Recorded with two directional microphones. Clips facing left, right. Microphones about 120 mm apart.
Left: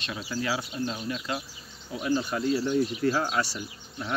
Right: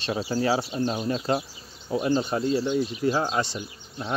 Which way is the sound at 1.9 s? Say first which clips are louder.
Right 4 dB; 25° right (ahead or behind).